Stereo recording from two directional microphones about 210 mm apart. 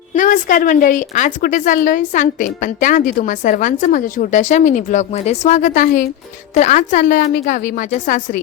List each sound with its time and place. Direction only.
0.1 s a woman's voice: 40° left (ahead or behind)